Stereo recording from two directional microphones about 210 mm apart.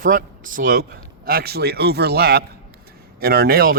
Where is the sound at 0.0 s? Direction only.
40° right (ahead or behind).